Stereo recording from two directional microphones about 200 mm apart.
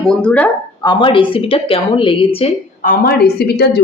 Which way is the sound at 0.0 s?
5° left (ahead or behind).